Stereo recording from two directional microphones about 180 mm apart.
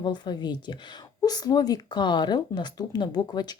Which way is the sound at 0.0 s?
25° left (ahead or behind).